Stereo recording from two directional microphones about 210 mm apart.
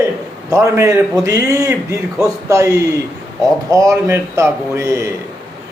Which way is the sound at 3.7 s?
15° right (ahead or behind).